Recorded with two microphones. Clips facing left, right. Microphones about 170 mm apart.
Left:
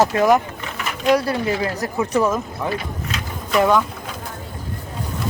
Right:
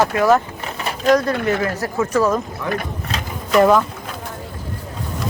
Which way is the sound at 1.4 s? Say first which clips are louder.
Right 2 dB; 55° right (ahead or behind).